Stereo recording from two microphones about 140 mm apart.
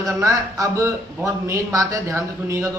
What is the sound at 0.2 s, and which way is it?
Speech, 25° right (ahead or behind).